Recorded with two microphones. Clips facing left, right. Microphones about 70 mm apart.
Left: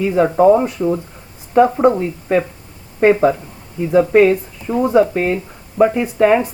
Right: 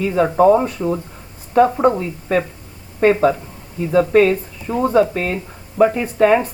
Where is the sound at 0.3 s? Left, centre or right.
Centre.